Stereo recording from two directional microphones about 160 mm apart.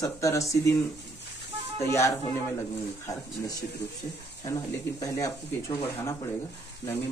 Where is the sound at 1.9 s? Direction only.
20° left (ahead or behind).